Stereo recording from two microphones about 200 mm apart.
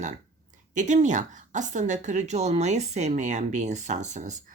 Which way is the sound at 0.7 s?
40° right (ahead or behind).